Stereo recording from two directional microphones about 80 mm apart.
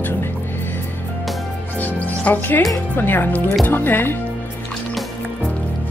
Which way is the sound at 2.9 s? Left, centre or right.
Left.